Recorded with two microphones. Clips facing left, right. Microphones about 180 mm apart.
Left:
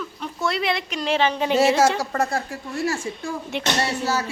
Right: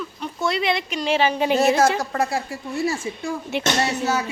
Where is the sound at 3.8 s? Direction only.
20° right (ahead or behind).